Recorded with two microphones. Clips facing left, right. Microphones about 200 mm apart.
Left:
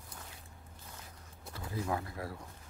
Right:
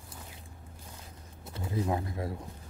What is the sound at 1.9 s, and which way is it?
Pigeon, 25° right (ahead or behind).